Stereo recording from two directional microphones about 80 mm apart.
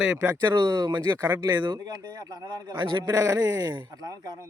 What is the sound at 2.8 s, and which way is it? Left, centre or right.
Speech, right.